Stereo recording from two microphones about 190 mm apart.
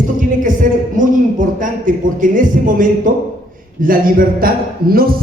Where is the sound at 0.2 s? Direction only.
45° right (ahead or behind).